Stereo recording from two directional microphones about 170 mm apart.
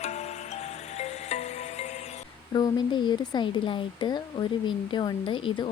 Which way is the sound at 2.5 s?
25° left (ahead or behind).